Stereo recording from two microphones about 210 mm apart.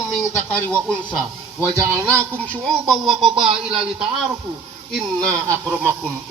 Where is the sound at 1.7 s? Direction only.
15° right (ahead or behind).